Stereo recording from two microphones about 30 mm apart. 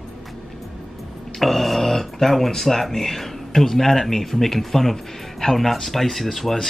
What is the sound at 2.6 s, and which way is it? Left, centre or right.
A man's voice, centre.